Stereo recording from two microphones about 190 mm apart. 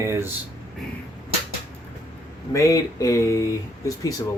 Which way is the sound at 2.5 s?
15° left (ahead or behind).